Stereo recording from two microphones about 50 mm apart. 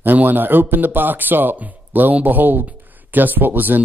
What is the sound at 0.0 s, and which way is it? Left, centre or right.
Speech, right.